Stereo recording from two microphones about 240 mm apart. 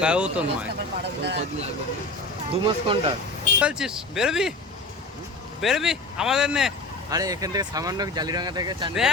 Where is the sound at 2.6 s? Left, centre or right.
Right.